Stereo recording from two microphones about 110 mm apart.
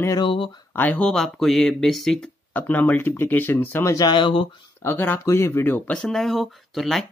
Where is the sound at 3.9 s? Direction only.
45° left (ahead or behind).